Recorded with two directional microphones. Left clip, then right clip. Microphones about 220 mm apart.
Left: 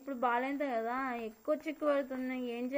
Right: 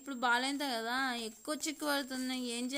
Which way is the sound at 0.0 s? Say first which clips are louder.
Right 1 dB; 40° right (ahead or behind).